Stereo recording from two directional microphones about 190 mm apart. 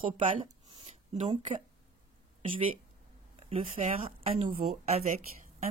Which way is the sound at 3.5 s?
35° right (ahead or behind).